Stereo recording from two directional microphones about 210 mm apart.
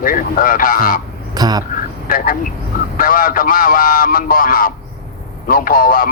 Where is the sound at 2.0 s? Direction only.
40° left (ahead or behind).